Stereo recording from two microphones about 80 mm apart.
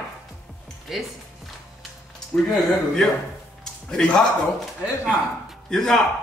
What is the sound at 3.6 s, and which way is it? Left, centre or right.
Music, centre.